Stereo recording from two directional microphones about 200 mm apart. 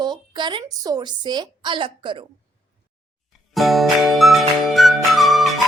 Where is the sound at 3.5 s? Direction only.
Centre (ahead or behind).